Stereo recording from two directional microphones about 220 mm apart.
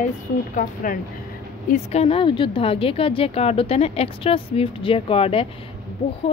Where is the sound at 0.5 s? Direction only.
35° left (ahead or behind).